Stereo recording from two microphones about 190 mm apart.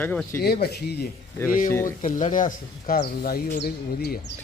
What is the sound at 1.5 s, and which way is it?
Speech, 45° left (ahead or behind).